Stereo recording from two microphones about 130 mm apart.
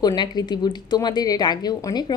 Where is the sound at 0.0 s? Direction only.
30° left (ahead or behind).